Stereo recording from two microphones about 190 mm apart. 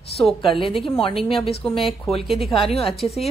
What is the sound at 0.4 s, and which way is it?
Speech, 25° left (ahead or behind).